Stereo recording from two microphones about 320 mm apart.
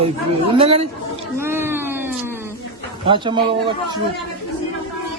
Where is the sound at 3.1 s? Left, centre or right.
Centre.